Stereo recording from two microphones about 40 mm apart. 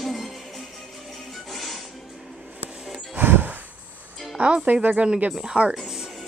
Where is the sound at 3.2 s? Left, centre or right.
Right.